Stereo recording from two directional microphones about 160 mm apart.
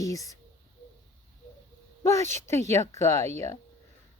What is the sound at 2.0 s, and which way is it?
Speech, 20° left (ahead or behind).